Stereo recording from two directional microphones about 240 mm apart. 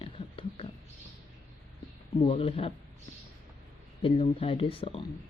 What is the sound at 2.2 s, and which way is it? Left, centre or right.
Speech, left.